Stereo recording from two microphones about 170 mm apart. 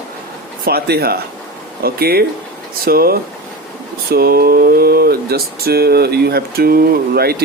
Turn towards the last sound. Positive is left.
turn(degrees=-65)  # may be behind; listen again after turning